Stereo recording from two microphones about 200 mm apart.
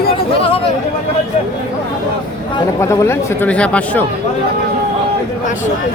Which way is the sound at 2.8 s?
15° left (ahead or behind).